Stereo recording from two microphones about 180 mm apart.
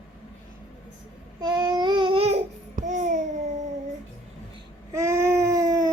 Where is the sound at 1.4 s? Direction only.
25° right (ahead or behind); by 3.2 s 45° right (ahead or behind).